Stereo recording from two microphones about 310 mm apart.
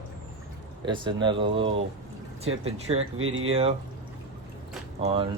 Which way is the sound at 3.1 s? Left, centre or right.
Right.